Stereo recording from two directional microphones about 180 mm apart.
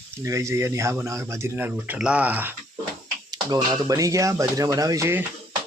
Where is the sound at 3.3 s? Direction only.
20° right (ahead or behind).